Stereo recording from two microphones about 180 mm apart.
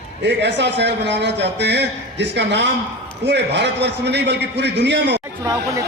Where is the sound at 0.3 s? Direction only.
75° right (ahead or behind).